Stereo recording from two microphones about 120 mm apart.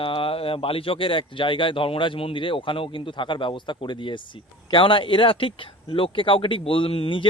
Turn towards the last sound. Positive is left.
turn(degrees=50)  # may be behind; listen again after turning